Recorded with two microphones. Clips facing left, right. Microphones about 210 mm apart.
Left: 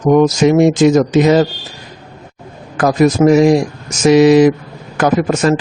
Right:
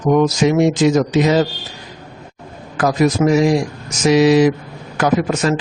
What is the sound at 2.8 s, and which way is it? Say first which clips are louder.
A man's voice: left 4 dB; 50° left (ahead or behind).